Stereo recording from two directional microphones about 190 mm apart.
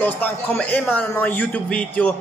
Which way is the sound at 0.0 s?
10° left (ahead or behind).